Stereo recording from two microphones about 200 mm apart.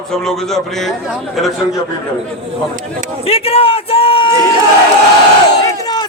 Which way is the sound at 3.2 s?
30° left (ahead or behind).